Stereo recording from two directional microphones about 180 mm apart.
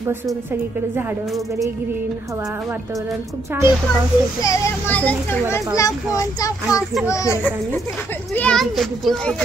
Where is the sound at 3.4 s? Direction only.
15° right (ahead or behind).